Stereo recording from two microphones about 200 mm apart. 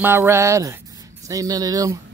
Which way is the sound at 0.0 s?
10° right (ahead or behind).